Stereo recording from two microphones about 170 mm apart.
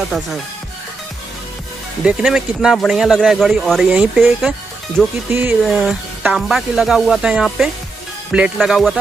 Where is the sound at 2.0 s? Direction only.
5° right (ahead or behind).